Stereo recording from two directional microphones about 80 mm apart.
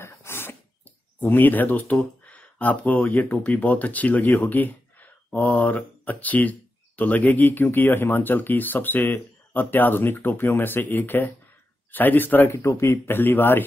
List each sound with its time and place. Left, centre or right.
0.0 s a sound: left
1.2 s speech: left
12.5 s speech: left